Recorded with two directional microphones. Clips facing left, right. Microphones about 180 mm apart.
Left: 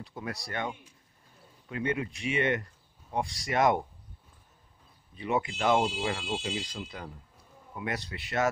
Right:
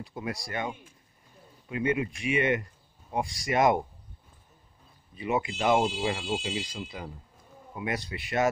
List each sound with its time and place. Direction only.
0.0 s speech: 10° right (ahead or behind)
5.1 s speech: 10° right (ahead or behind)